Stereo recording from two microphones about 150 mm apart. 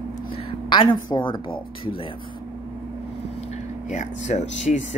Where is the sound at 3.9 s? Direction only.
50° left (ahead or behind).